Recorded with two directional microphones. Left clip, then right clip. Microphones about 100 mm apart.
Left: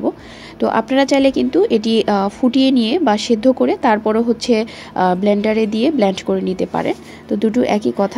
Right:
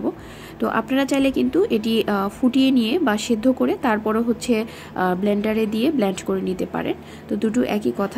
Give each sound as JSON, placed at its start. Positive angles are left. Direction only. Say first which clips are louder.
{"t": 0.6, "sound": "a woman's voice", "louder": "left 6 dB", "side_deg": 25}